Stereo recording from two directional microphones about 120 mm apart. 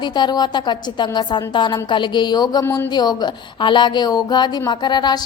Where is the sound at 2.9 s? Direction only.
35° left (ahead or behind).